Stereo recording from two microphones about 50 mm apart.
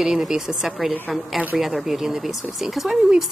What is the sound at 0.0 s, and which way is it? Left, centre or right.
A woman's voice, centre.